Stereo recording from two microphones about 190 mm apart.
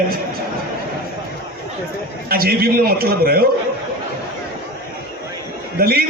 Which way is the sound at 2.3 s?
50° right (ahead or behind).